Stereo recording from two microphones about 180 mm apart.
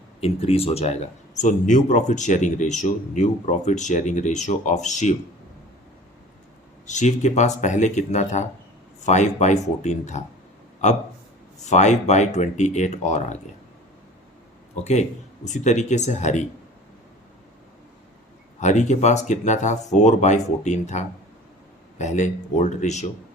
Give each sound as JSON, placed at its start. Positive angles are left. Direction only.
{"t": 0.2, "sound": "speech", "side_deg": 30}
{"t": 6.8, "sound": "speech", "side_deg": 40}
{"t": 11.6, "sound": "speech", "side_deg": 40}
{"t": 15.4, "sound": "speech", "side_deg": 40}
{"t": 18.6, "sound": "speech", "side_deg": 40}